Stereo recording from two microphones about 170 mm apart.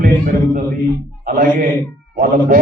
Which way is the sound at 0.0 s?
55° right (ahead or behind).